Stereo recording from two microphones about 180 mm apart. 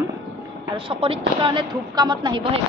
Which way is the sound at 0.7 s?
30° right (ahead or behind).